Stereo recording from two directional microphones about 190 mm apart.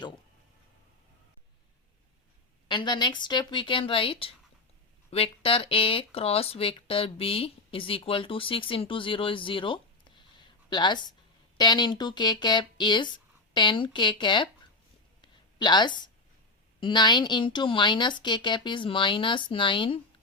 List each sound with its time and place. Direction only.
2.6 s speech: 25° left (ahead or behind)
15.2 s a sound: 25° left (ahead or behind)
16.8 s speech: 25° left (ahead or behind)